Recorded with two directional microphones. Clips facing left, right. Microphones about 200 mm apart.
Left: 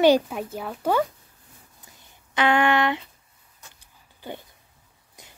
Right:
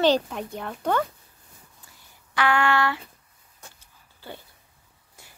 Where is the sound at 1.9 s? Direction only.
20° left (ahead or behind).